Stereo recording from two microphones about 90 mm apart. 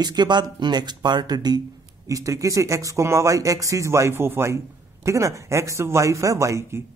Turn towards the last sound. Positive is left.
turn(degrees=-35)  # may be behind; listen again after turning